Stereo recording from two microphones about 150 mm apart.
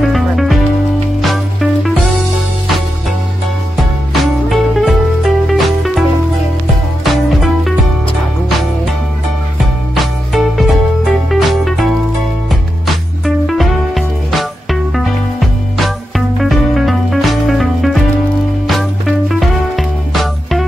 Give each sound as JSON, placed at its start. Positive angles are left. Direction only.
{"t": 0.0, "sound": "music", "side_deg": 0}
{"t": 3.7, "sound": "music", "side_deg": 0}
{"t": 7.1, "sound": "music", "side_deg": 0}
{"t": 9.9, "sound": "music", "side_deg": 0}